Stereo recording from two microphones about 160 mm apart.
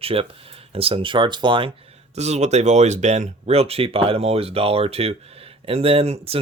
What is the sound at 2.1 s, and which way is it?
Speech, 45° right (ahead or behind).